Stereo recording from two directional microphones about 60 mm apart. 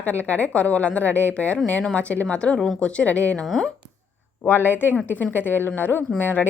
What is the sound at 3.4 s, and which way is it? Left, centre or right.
Speech, centre.